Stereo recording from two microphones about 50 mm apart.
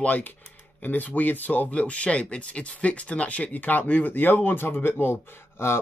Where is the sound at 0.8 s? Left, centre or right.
Left.